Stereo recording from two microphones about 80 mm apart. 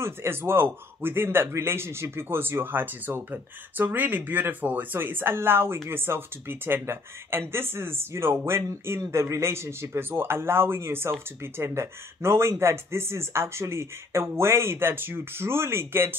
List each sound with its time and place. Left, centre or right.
0.0 s a man's voice: right